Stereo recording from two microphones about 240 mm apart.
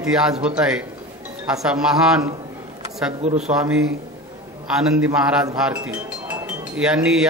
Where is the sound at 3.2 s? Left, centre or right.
Right.